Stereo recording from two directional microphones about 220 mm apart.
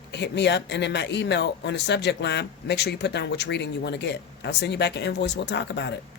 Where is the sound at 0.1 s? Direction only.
50° left (ahead or behind).